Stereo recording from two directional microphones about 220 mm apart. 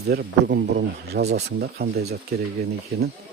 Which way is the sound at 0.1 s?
45° right (ahead or behind).